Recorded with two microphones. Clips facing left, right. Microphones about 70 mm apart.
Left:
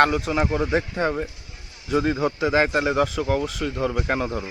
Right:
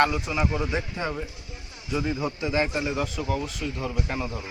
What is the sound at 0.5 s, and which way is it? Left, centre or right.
Speech, left.